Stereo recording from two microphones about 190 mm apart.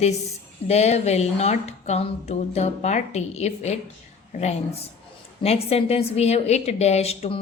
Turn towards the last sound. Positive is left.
turn(degrees=30)  # may be behind; listen again after turning